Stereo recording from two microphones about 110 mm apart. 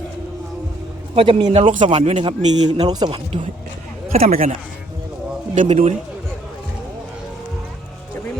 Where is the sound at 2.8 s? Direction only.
40° right (ahead or behind).